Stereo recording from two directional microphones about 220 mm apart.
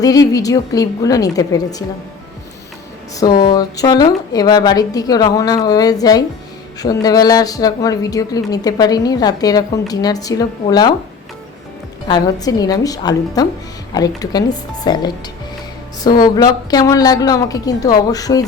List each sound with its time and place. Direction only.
0.0 s speech: 15° left (ahead or behind)
3.4 s speech: 15° left (ahead or behind)
12.0 s speech: 20° left (ahead or behind)